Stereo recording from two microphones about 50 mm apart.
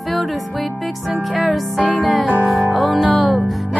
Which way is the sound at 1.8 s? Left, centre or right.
Left.